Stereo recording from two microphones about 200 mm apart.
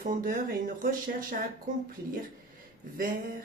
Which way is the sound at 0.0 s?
45° right (ahead or behind).